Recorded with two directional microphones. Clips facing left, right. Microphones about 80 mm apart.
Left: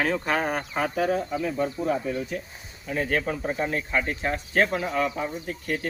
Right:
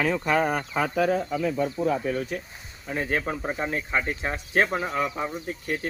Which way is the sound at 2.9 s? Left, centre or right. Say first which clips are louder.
Left 1 dB; right.